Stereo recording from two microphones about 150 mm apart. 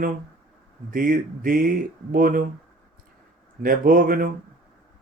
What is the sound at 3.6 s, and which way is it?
Speech, 70° right (ahead or behind).